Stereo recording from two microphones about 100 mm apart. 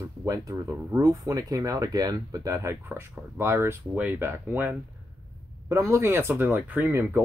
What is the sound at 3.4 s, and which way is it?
Speech, 25° right (ahead or behind).